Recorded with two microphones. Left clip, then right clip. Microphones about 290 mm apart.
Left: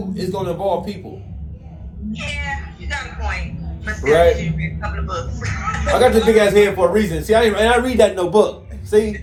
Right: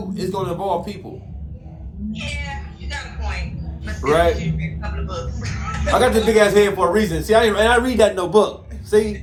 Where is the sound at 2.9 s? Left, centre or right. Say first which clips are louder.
Left 5 dB; left.